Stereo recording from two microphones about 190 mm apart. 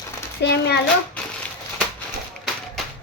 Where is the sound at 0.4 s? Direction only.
60° left (ahead or behind).